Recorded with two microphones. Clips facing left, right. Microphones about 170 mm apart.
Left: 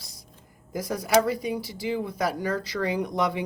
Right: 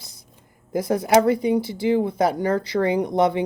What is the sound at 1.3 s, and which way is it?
Speech, 25° right (ahead or behind).